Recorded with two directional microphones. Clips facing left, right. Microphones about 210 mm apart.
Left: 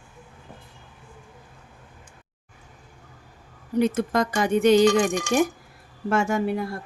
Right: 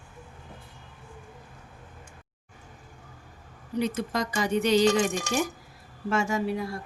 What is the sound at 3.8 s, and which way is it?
Speech, 50° left (ahead or behind).